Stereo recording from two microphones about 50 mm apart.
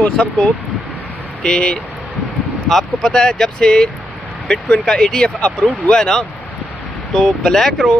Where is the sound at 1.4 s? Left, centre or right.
Centre.